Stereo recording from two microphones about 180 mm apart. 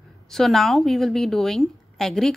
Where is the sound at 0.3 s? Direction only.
Centre (ahead or behind).